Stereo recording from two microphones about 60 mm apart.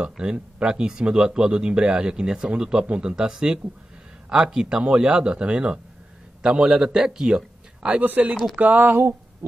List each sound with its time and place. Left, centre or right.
0.0 s a man's voice: centre; by 9.0 s right